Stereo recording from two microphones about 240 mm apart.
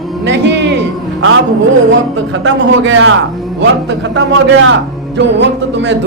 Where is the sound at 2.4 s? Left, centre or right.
Right.